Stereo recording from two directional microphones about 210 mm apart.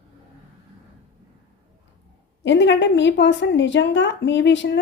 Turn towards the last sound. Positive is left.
turn(degrees=60)  # may be behind; listen again after turning